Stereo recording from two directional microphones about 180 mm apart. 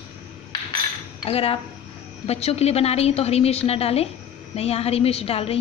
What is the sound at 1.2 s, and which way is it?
A woman's voice, 35° left (ahead or behind).